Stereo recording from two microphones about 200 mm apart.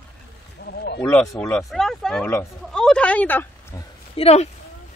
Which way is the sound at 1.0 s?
5° left (ahead or behind).